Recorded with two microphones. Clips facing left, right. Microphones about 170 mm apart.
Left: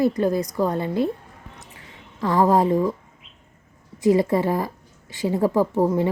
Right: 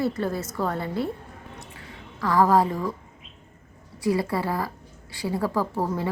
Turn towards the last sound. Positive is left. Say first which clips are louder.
# left 7 dB
turn(degrees=20)  # may be behind; listen again after turning